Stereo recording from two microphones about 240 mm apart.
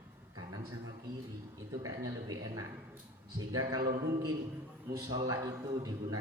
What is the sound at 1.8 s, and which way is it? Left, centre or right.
A man's voice, centre.